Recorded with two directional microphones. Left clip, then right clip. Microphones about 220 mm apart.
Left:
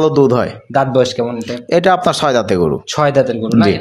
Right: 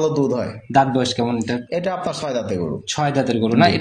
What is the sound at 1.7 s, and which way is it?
Speech, 50° left (ahead or behind).